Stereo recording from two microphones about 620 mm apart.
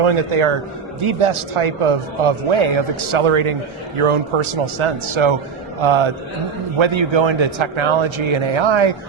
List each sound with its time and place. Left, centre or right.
0.0 s a man's voice: right